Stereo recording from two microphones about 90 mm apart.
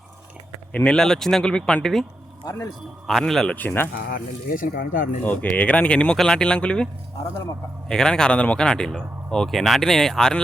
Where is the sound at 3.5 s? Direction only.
20° left (ahead or behind).